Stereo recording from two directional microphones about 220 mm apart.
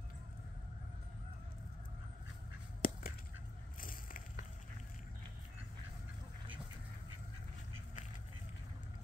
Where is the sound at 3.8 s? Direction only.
40° left (ahead or behind).